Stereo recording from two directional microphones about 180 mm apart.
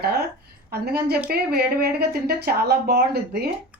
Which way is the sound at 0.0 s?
60° right (ahead or behind).